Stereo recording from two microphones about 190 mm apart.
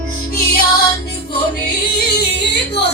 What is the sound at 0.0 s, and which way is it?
Music, 50° left (ahead or behind).